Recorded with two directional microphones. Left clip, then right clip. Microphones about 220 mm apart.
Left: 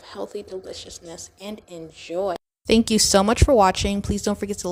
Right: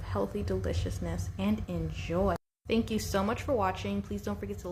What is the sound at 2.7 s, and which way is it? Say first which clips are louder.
A woman's voice: left 13 dB; 55° left (ahead or behind).